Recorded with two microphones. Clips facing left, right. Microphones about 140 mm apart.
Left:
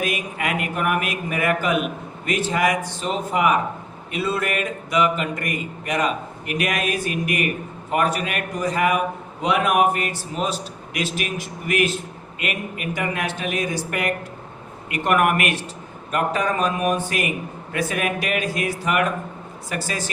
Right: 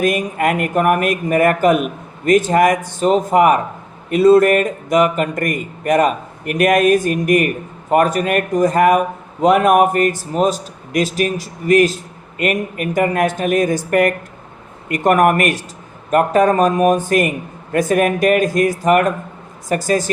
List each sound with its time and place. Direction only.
0.0 s a man's voice: 45° right (ahead or behind)